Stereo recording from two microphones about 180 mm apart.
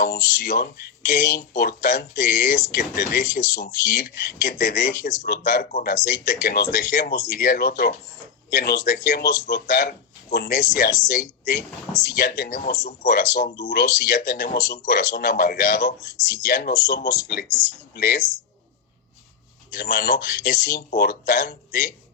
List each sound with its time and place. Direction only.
0.0 s speech: 60° left (ahead or behind)
17.0 s speech: 20° left (ahead or behind)
17.9 s speech: 60° left (ahead or behind)
19.7 s speech: 60° left (ahead or behind)